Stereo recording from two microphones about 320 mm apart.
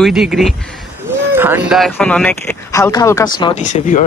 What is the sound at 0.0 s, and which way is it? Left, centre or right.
Speech, centre.